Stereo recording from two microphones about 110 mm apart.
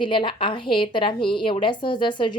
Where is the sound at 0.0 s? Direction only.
50° left (ahead or behind).